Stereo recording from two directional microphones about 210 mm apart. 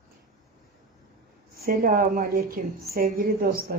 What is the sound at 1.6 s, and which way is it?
A woman's voice, 45° right (ahead or behind).